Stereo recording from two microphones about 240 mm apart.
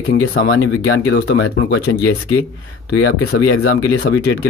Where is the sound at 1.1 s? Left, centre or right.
Left.